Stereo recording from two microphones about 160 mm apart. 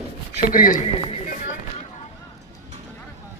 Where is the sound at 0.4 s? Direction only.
60° left (ahead or behind).